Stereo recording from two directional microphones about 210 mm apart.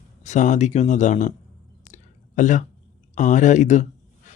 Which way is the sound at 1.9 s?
35° left (ahead or behind).